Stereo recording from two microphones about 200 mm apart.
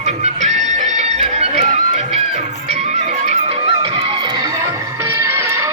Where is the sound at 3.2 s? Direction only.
30° right (ahead or behind).